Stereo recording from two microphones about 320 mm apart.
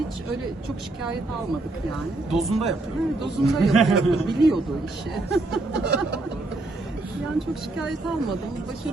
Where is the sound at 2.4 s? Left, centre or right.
Centre.